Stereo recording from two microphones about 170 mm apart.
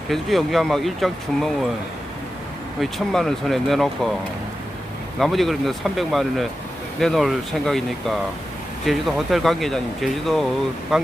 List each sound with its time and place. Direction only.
0.1 s speech: centre (ahead or behind)
2.8 s speech: centre (ahead or behind)
5.2 s speech: centre (ahead or behind)